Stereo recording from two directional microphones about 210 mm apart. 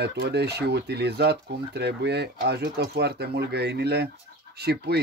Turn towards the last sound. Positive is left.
turn(degrees=-50)  # may be behind; listen again after turning